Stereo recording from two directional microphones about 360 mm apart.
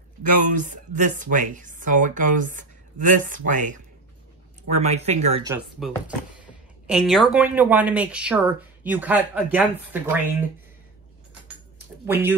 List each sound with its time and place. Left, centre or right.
0.2 s speech: right; by 10.3 s centre
12.1 s speech: centre